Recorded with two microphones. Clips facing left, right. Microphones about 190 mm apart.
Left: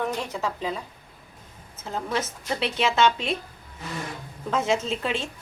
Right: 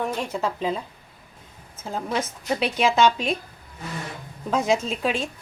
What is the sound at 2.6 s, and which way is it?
Speech, 25° left (ahead or behind).